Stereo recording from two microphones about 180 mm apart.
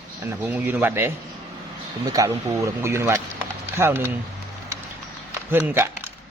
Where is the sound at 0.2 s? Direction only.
10° right (ahead or behind).